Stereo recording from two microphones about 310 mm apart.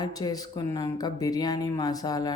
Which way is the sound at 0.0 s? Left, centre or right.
Centre.